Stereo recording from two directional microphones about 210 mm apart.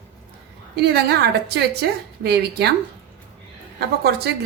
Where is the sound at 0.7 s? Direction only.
50° right (ahead or behind).